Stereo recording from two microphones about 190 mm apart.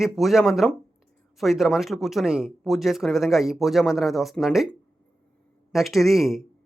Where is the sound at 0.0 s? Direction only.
Centre (ahead or behind).